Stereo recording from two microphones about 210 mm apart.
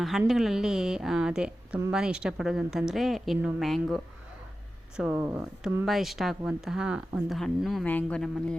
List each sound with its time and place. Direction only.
0.0 s a woman's voice: centre (ahead or behind)